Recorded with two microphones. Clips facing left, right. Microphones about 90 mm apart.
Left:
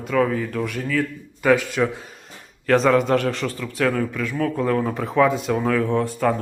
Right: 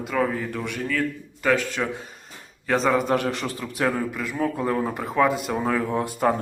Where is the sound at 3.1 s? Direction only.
15° right (ahead or behind).